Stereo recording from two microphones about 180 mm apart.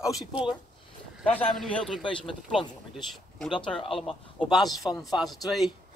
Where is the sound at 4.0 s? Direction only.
Centre (ahead or behind).